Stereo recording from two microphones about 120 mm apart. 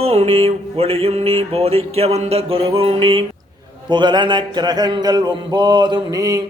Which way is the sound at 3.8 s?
40° right (ahead or behind).